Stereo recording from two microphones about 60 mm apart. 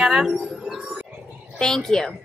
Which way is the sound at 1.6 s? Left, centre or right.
Centre.